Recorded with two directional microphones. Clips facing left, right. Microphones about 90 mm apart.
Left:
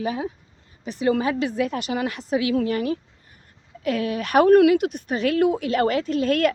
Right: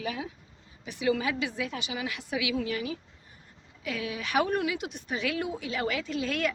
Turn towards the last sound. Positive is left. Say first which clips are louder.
# left 9 dB
turn(degrees=55)  # may be behind; listen again after turning